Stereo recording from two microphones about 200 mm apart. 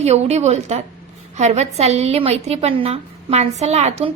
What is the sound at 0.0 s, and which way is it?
A woman's voice, 30° right (ahead or behind).